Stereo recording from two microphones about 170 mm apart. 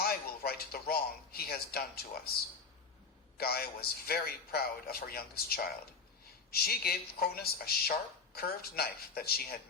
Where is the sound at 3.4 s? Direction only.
65° left (ahead or behind).